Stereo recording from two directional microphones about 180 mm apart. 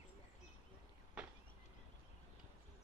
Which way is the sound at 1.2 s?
5° right (ahead or behind).